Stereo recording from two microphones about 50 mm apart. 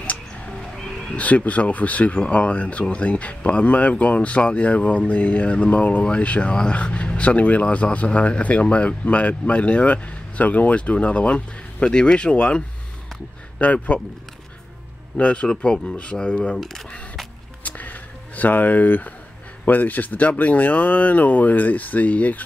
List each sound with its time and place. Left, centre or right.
0.7 s a sound: centre
1.1 s speech: left
15.1 s speech: left
16.5 s speech: centre
17.6 s a sound: left
19.6 s speech: left